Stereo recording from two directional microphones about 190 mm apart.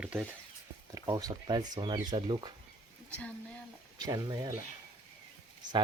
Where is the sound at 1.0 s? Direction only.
20° right (ahead or behind).